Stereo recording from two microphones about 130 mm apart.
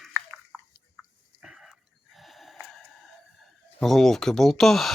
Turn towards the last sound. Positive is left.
turn(degrees=0)  # may be behind; listen again after turning